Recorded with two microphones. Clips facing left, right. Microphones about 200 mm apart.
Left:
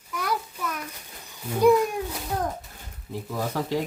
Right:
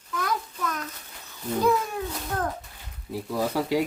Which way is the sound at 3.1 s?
10° right (ahead or behind).